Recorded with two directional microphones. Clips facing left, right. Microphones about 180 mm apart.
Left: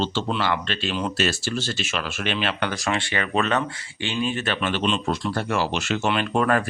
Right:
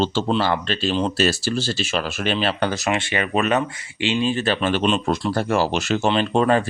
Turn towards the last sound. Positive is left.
turn(degrees=-25)  # may be behind; listen again after turning